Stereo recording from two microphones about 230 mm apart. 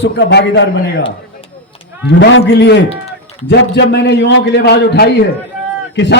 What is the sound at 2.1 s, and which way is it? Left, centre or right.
A man's voice, left.